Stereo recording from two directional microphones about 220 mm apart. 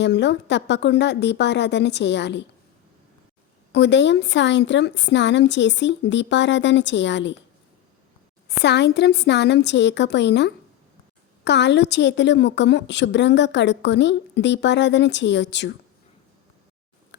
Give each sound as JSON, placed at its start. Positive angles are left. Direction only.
{"t": 0.0, "sound": "a woman's voice", "side_deg": 50}
{"t": 3.7, "sound": "a woman's voice", "side_deg": 50}
{"t": 8.6, "sound": "a woman's voice", "side_deg": 50}